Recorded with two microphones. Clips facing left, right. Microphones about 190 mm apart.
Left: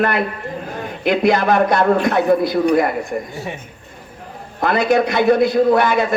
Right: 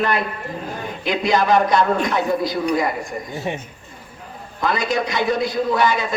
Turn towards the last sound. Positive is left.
turn(degrees=55)  # may be behind; listen again after turning